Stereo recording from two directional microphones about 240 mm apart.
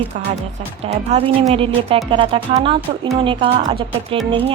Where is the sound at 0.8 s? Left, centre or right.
Right.